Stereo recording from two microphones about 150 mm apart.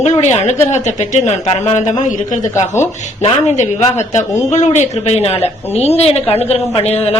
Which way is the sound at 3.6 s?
50° left (ahead or behind).